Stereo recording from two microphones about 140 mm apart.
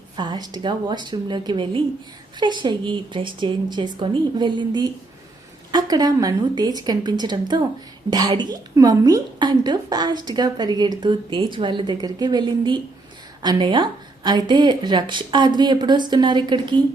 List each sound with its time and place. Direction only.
0.2 s a woman's voice: 30° right (ahead or behind)